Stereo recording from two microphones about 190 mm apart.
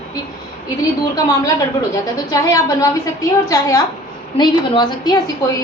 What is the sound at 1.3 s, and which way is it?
A woman's voice, 20° left (ahead or behind).